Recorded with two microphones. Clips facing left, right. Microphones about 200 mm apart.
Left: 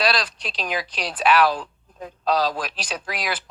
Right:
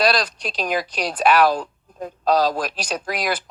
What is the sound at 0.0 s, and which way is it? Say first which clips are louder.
Speech: right 4 dB; 45° right (ahead or behind).